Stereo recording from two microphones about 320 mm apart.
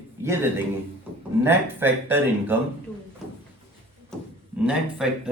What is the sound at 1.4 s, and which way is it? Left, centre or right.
Speech, centre.